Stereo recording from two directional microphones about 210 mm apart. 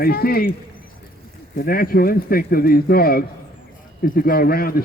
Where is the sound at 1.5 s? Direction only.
45° left (ahead or behind).